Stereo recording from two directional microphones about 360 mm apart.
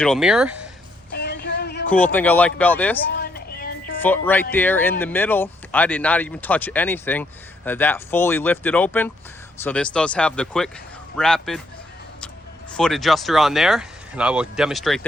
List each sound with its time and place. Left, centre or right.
0.0 s speech: centre
1.1 s a sound: left
2.1 s speech: centre
3.1 s music: left
4.0 s speech: centre
12.7 s speech: centre